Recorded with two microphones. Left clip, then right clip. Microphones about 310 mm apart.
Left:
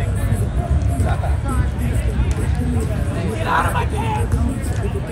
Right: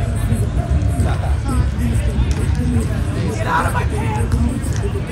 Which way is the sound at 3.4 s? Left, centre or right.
Centre.